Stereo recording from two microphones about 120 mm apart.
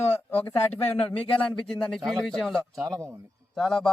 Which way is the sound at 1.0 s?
10° left (ahead or behind).